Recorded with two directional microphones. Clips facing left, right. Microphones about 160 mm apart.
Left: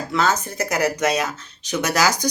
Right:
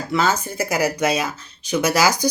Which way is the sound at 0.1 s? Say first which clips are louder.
Right 1 dB; centre (ahead or behind).